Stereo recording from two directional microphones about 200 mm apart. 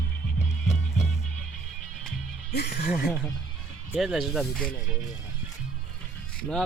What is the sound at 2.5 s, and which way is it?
Speech, 55° left (ahead or behind).